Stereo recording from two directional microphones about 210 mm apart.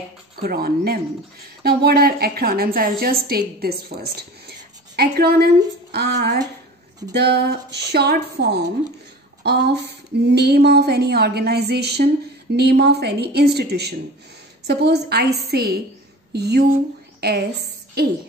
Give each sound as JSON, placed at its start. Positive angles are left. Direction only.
{"t": 0.4, "sound": "a woman's voice", "side_deg": -45}